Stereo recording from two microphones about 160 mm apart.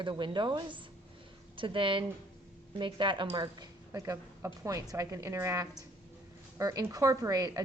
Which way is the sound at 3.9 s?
20° right (ahead or behind).